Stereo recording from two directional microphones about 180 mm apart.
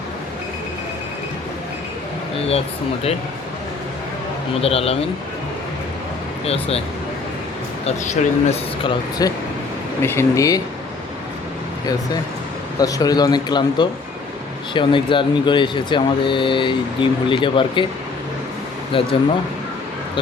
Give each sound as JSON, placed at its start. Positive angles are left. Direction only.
{"t": 4.6, "sound": "speech", "side_deg": 35}
{"t": 6.4, "sound": "speech", "side_deg": 35}
{"t": 8.0, "sound": "speech", "side_deg": 40}
{"t": 8.8, "sound": "speech", "side_deg": 20}
{"t": 12.8, "sound": "speech", "side_deg": 20}
{"t": 18.9, "sound": "speech", "side_deg": 30}